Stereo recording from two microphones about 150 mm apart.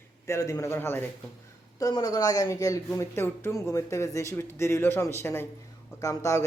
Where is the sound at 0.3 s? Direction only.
20° left (ahead or behind).